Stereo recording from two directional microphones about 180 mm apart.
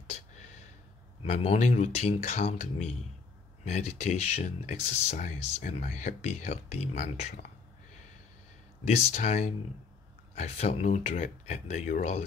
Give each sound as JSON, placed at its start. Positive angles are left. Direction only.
{"t": 1.2, "sound": "speech", "side_deg": 40}
{"t": 8.8, "sound": "speech", "side_deg": 40}